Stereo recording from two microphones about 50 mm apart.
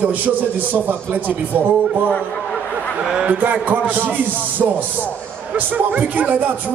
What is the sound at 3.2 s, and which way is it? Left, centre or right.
Speech, right.